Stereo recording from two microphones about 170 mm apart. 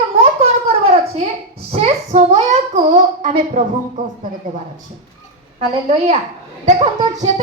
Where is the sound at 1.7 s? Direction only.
35° right (ahead or behind).